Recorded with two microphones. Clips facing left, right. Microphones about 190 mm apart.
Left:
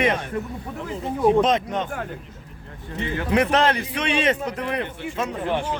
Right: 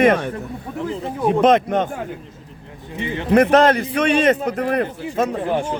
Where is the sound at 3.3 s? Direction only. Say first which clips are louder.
Right 7 dB; 45° right (ahead or behind).